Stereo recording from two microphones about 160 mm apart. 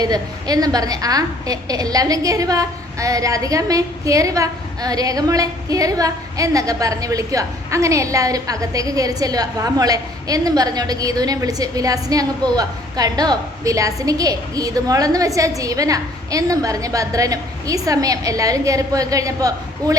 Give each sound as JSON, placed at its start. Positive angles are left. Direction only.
{"t": 0.0, "sound": "a woman's voice", "side_deg": -25}